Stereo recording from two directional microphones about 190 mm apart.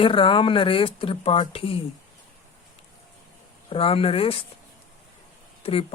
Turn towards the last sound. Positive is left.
turn(degrees=30)  # may be behind; listen again after turning